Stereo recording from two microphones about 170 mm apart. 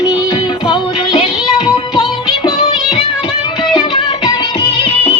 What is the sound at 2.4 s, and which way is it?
Music, 35° left (ahead or behind).